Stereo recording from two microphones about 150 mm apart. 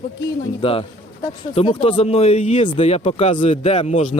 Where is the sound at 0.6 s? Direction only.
40° left (ahead or behind).